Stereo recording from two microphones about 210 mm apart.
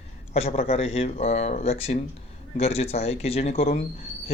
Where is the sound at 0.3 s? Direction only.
30° left (ahead or behind).